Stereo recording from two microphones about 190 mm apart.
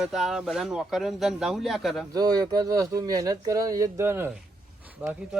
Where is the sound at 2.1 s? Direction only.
20° right (ahead or behind).